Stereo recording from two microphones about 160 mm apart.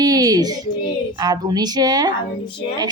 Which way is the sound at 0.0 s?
25° right (ahead or behind).